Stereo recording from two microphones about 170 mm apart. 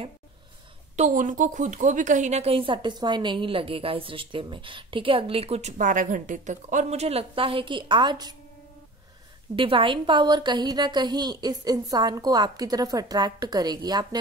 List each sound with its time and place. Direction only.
0.9 s a woman's voice: 45° right (ahead or behind); by 8.4 s 25° right (ahead or behind)
9.6 s a woman's voice: 30° right (ahead or behind)